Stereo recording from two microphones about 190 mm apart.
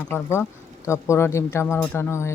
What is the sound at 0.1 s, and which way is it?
Speech, 15° left (ahead or behind).